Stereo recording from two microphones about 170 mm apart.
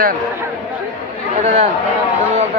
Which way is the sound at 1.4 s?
40° right (ahead or behind).